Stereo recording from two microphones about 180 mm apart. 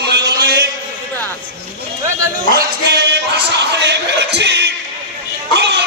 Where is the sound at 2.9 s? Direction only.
70° right (ahead or behind).